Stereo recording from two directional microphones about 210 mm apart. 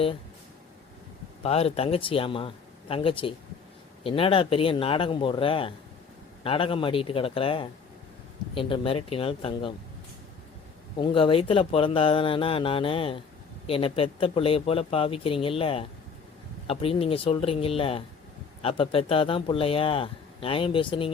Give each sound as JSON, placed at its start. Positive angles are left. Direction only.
{"t": 1.4, "sound": "speech", "side_deg": 30}
{"t": 11.0, "sound": "speech", "side_deg": 25}